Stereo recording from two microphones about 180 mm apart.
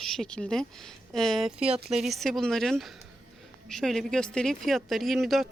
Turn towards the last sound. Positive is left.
turn(degrees=0)  # may be behind; listen again after turning